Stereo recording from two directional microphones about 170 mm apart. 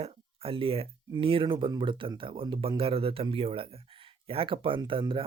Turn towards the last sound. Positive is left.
turn(degrees=-30)  # may be behind; listen again after turning